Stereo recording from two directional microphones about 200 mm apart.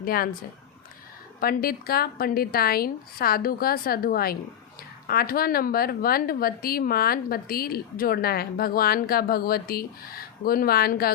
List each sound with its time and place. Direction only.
0.0 s a woman's voice: 45° left (ahead or behind)
1.4 s speech: 50° left (ahead or behind)